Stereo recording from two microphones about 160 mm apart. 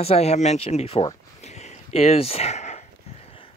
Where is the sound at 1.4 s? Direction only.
45° left (ahead or behind).